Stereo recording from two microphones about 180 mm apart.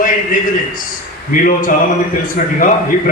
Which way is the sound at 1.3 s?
50° left (ahead or behind).